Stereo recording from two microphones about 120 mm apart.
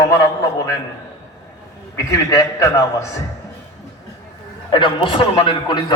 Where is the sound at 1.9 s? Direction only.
25° left (ahead or behind).